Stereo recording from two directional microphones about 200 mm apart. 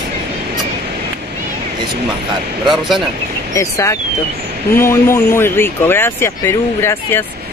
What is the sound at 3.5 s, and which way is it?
Speech, 15° left (ahead or behind).